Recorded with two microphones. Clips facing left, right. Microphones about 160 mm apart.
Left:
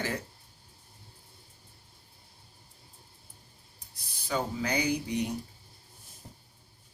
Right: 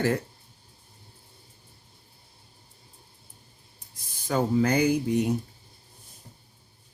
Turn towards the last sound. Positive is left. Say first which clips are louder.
# right 7 dB
turn(degrees=-50)  # may be behind; listen again after turning